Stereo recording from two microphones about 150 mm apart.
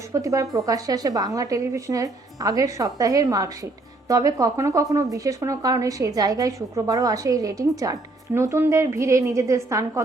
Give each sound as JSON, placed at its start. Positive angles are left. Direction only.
{"t": 0.1, "sound": "a woman's voice", "side_deg": -20}